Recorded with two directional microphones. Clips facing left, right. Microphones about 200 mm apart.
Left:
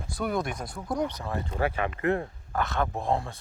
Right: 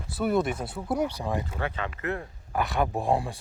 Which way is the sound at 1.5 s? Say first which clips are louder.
Left 4 dB; 30° left (ahead or behind).